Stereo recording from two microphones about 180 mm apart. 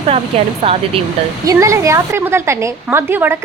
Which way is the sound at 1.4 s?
15° right (ahead or behind).